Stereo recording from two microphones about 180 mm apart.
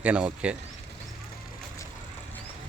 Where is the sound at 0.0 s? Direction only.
5° right (ahead or behind).